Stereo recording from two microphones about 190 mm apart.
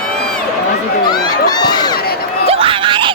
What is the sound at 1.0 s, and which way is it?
Crowd, 20° left (ahead or behind).